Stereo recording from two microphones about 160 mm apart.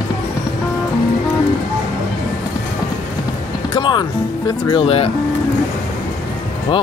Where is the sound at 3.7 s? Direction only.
30° left (ahead or behind).